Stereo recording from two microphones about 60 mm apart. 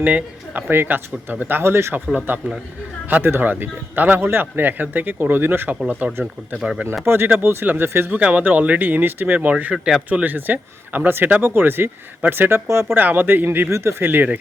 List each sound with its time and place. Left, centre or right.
0.0 s speech: right
0.7 s speech: right
3.1 s speech: right
5.8 s speech: right
7.0 s speech: right
8.1 s speech: right
9.7 s speech: centre
10.1 s speech: right
12.6 s speech: right
13.0 s speech: right
13.7 s speech: right